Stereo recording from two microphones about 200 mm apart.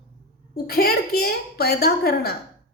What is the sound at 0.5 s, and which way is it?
A woman's voice, 50° left (ahead or behind).